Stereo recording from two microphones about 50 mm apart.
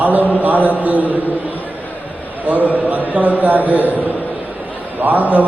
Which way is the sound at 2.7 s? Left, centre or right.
Right.